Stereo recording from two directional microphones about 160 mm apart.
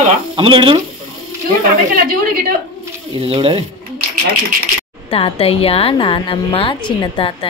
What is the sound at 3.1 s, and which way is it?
Speech, 35° right (ahead or behind).